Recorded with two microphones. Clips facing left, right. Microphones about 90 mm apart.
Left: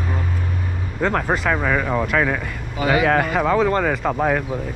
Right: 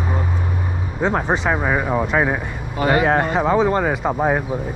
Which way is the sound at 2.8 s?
Centre (ahead or behind).